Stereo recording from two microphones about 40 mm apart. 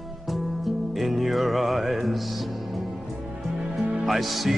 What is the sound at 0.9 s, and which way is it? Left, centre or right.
Music, centre.